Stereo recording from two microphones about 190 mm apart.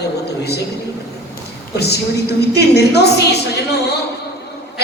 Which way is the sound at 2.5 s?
60° left (ahead or behind).